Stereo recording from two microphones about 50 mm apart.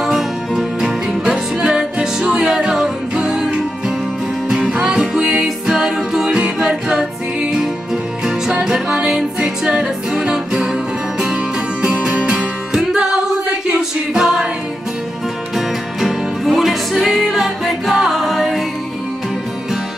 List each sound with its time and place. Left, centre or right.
0.0 s music: centre
6.2 s music: right
15.5 s music: centre